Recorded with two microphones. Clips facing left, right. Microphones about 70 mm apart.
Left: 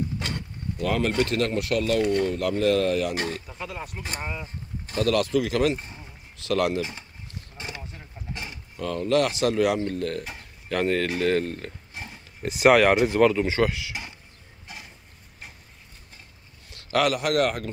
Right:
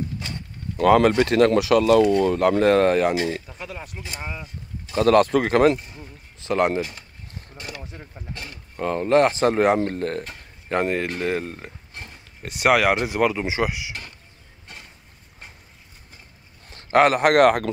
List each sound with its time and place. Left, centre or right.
0.7 s speech: right
1.5 s speech: right
2.6 s speech: right
3.5 s speech: centre
4.9 s speech: right
5.9 s a sound: right
6.8 s speech: left
7.5 s a sound: left
8.3 s mechanisms: centre
8.7 s speech: right
10.7 s speech: centre
12.4 s speech: centre
14.7 s a sound: centre
16.7 s speech: right